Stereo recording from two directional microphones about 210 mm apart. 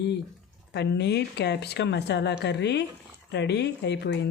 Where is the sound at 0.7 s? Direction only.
55° left (ahead or behind).